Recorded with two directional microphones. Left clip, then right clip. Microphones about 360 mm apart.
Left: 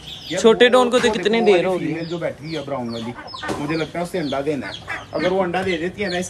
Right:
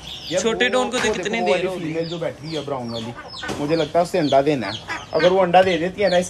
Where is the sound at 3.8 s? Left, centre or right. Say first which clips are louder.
Right 6 dB; centre.